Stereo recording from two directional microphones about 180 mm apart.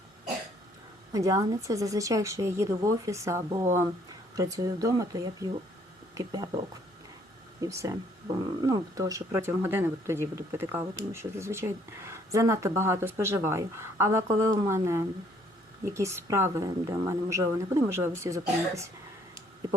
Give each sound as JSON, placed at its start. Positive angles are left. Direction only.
{"t": 1.1, "sound": "speech", "side_deg": -20}
{"t": 7.6, "sound": "speech", "side_deg": -20}
{"t": 15.8, "sound": "speech", "side_deg": -15}